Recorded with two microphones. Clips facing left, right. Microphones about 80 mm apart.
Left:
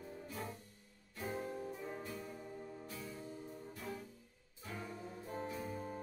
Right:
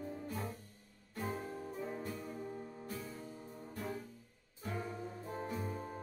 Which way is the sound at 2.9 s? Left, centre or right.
Right.